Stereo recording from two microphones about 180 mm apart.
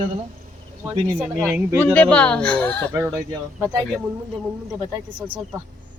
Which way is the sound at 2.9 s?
15° right (ahead or behind).